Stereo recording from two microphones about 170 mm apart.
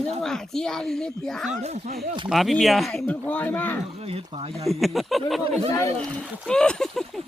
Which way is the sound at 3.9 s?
35° right (ahead or behind).